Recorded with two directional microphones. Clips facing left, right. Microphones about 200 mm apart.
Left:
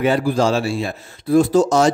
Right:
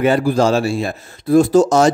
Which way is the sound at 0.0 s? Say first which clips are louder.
Right 3 dB; 45° right (ahead or behind).